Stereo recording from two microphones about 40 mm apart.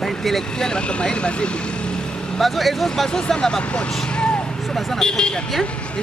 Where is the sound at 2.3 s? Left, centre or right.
Centre.